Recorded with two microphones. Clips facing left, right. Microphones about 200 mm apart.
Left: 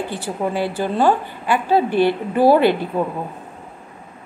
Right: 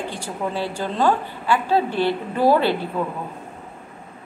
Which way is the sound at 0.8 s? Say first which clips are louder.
Left 3 dB; 15° left (ahead or behind).